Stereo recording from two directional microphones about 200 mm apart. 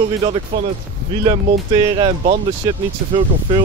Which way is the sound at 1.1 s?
25° right (ahead or behind).